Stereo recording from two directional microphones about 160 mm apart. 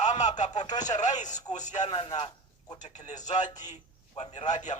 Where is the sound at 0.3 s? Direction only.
50° left (ahead or behind).